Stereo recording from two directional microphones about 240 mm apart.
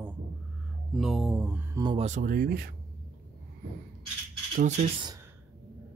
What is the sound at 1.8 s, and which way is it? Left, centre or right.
Speech, right.